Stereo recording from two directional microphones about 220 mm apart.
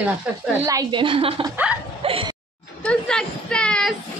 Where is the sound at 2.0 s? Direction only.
25° right (ahead or behind).